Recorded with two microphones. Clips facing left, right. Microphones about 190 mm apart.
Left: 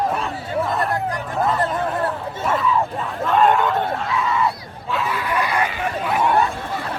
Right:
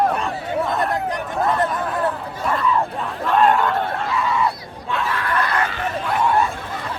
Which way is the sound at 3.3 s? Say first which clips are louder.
Even; centre (ahead or behind).